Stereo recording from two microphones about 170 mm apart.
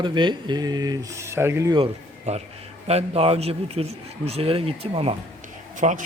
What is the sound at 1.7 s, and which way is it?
A man's voice, 35° right (ahead or behind).